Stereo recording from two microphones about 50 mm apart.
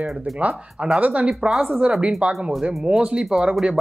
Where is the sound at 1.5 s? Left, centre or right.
Centre.